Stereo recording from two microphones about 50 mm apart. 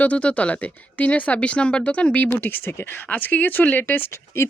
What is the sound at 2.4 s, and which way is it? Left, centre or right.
A woman's voice, left.